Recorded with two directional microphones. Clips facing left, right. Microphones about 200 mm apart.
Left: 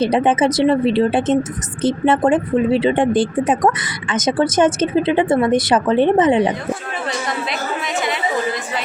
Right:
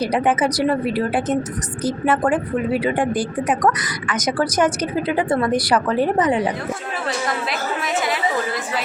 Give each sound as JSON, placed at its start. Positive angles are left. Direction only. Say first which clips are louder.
{"t": 0.0, "sound": "speech", "louder": "left 4 dB", "side_deg": 25}